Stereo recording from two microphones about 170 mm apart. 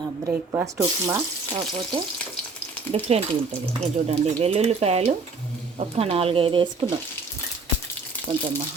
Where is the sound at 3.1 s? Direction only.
40° right (ahead or behind).